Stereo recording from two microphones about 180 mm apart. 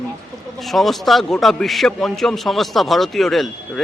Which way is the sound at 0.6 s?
Centre (ahead or behind).